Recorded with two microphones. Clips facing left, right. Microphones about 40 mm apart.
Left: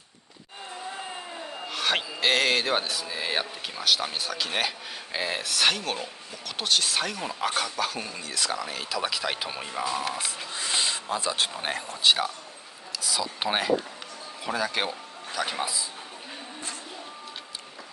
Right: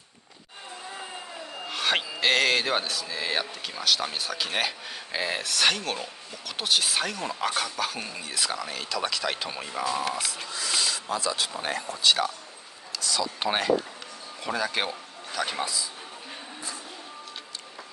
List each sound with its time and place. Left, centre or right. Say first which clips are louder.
1.7 s speech: right 1 dB; centre
10.1 s speech: right 1 dB; left
13.0 s speech: right 1 dB; centre
15.6 s speech: even; centre